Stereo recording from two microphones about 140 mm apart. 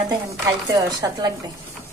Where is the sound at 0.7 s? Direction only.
25° right (ahead or behind).